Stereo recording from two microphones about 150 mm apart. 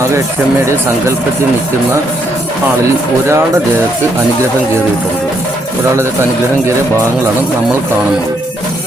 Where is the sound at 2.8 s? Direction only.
20° right (ahead or behind).